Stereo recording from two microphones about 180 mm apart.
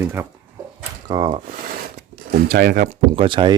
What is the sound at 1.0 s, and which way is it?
Speech, 25° right (ahead or behind).